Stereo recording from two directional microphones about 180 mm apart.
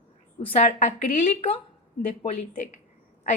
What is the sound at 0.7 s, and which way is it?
Speech, 40° left (ahead or behind).